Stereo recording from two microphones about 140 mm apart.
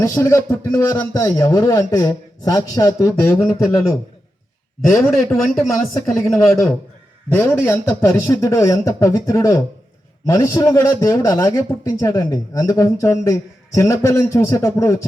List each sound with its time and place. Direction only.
0.0 s a man's voice: 20° left (ahead or behind)
5.4 s speech: centre (ahead or behind)
6.5 s a man's voice: 15° left (ahead or behind)